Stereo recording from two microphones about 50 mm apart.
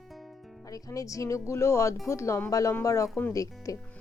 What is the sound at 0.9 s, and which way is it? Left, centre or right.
A woman's voice, left.